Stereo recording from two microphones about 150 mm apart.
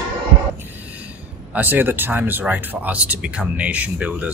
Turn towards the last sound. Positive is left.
turn(degrees=-10)  # may be behind; listen again after turning